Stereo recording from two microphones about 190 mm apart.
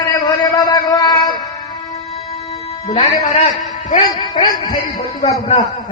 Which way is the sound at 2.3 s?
35° left (ahead or behind).